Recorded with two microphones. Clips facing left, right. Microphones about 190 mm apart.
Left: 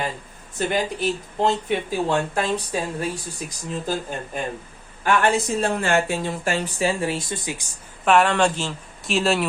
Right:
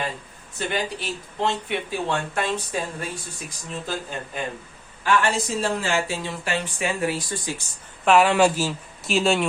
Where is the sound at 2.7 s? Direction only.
35° left (ahead or behind).